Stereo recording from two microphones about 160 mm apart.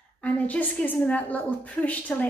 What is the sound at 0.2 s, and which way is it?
A woman's voice, 10° left (ahead or behind).